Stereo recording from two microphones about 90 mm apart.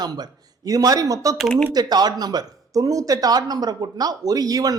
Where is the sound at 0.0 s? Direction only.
50° right (ahead or behind).